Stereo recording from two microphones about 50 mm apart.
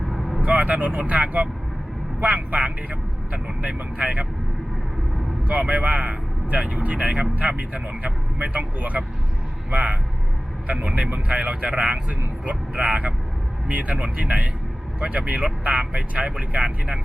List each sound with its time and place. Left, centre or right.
0.1 s vehicle: centre
0.4 s speech: right
5.5 s speech: right